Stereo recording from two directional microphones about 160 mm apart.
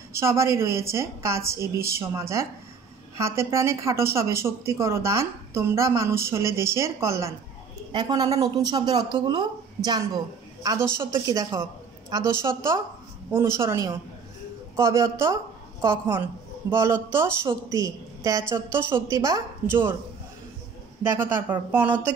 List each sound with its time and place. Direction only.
0.1 s a woman's voice: 15° right (ahead or behind)
21.0 s speech: 15° right (ahead or behind)